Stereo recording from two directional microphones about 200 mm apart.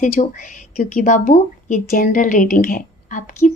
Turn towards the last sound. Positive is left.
turn(degrees=40)  # may be behind; listen again after turning